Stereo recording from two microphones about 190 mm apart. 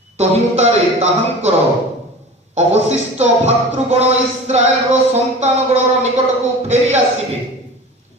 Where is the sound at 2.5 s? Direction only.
35° right (ahead or behind).